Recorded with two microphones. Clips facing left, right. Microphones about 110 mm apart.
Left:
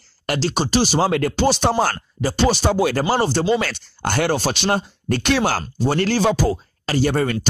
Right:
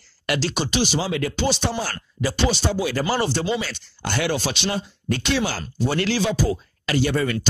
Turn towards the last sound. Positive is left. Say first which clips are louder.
# left 2 dB
turn(degrees=40)  # may be behind; listen again after turning